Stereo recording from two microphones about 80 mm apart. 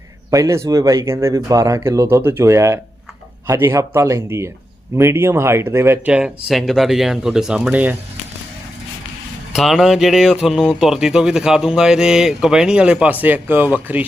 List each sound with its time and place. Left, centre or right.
0.3 s speech: right
1.5 s speech: right
6.1 s speech: centre
6.5 s speech: centre
9.6 s speech: centre